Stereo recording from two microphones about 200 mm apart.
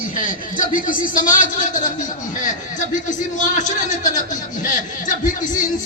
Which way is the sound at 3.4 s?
40° left (ahead or behind).